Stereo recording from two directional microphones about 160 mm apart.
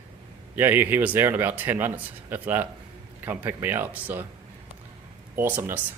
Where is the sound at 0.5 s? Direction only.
15° right (ahead or behind).